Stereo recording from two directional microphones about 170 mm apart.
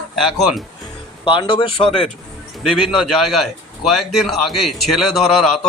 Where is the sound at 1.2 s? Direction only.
30° left (ahead or behind).